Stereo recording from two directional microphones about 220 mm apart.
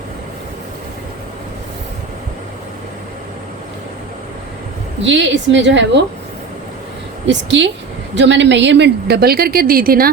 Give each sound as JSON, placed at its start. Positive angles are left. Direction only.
{"t": 5.0, "sound": "a woman's voice", "side_deg": -55}
{"t": 7.3, "sound": "a woman's voice", "side_deg": -55}